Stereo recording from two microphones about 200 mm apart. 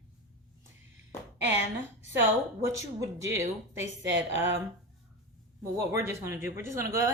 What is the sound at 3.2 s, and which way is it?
Speech, 15° right (ahead or behind).